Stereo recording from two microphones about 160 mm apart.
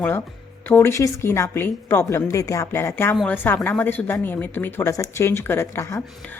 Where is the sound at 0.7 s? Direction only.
15° left (ahead or behind).